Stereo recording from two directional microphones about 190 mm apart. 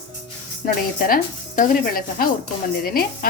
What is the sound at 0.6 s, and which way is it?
Speech, 50° left (ahead or behind).